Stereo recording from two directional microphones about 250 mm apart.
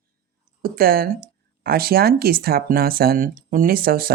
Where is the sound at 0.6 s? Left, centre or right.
Right.